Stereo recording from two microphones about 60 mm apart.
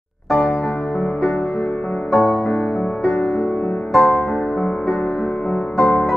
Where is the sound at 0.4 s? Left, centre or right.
Left.